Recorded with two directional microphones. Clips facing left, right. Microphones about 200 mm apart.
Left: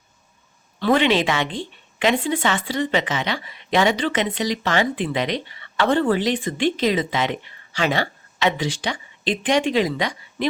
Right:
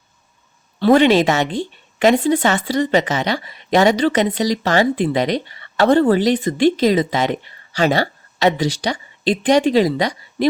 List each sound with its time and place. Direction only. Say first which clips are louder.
0.8 s speech: right 6 dB; 40° right (ahead or behind)